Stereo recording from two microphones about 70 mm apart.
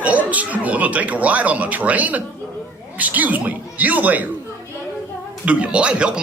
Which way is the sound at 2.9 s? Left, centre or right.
Right.